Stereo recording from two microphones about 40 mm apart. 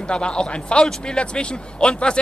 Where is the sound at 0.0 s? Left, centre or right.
Left.